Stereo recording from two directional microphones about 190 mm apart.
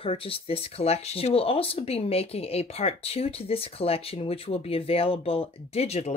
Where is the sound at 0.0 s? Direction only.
30° left (ahead or behind).